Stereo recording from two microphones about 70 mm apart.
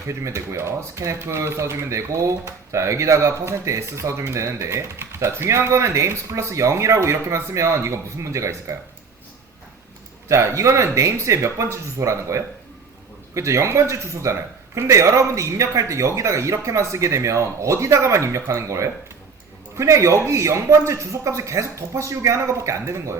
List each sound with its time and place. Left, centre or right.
0.1 s speech: right
10.2 s speech: right